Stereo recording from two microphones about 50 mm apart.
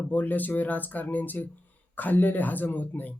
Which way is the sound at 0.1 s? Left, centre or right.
Left.